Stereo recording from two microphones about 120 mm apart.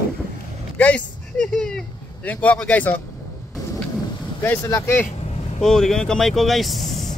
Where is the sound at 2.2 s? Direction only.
10° left (ahead or behind).